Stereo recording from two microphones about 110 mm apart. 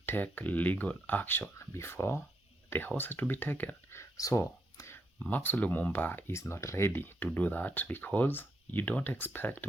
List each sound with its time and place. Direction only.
0.0 s speech: 20° left (ahead or behind)
4.2 s a sound: 30° left (ahead or behind)
5.2 s speech: 15° left (ahead or behind)